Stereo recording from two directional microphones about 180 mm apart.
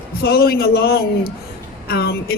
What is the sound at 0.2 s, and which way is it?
A man's voice, 60° left (ahead or behind).